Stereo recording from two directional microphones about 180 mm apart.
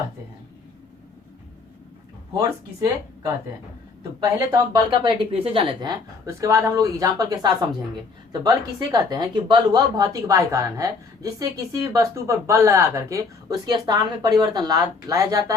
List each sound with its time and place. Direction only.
4.2 s a woman's voice: 20° right (ahead or behind)